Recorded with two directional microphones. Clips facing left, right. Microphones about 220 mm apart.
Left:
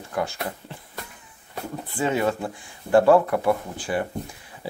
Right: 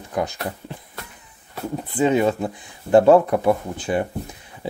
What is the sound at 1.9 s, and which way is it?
Speech, 20° right (ahead or behind).